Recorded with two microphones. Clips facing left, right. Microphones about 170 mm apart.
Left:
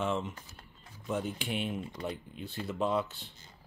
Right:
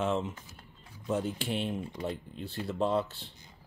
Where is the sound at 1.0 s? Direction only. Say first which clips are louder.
Right 3 dB; 35° right (ahead or behind).